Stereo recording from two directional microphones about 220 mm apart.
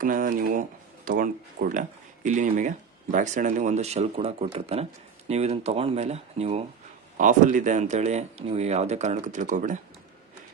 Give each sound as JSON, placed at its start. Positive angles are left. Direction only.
{"t": 0.0, "sound": "speech", "side_deg": -40}